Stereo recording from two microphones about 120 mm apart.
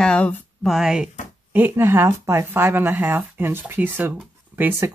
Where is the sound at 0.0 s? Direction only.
10° left (ahead or behind).